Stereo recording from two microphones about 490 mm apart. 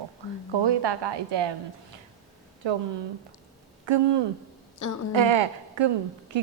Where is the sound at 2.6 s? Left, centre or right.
Right.